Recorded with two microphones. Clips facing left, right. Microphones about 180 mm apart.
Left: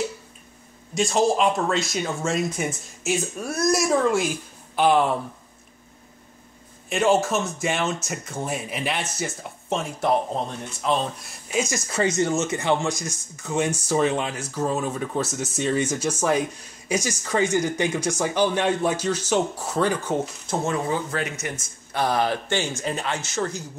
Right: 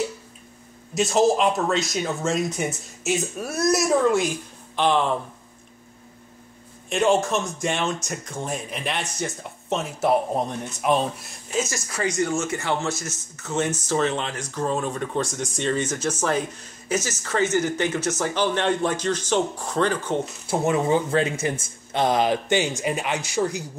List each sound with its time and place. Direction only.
0.9 s speech: centre (ahead or behind)
6.9 s speech: centre (ahead or behind)
11.5 s speech: 15° left (ahead or behind)
11.9 s speech: 25° left (ahead or behind); by 20.2 s 10° left (ahead or behind)
20.4 s speech: 20° right (ahead or behind)